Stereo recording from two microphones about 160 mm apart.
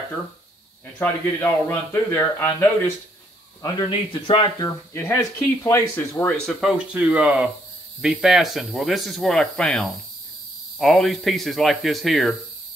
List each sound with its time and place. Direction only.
1.0 s speech: 10° left (ahead or behind)
3.6 s speech: 30° left (ahead or behind); by 6.5 s 10° left (ahead or behind)
6.6 s speech: 5° right (ahead or behind)